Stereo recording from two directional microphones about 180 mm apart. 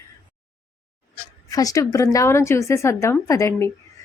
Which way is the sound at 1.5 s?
20° left (ahead or behind).